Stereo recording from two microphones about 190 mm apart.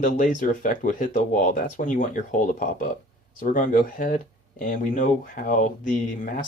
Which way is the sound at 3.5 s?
40° left (ahead or behind).